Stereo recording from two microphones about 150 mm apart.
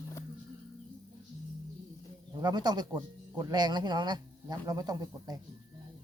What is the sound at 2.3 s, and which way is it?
Speech, 30° right (ahead or behind).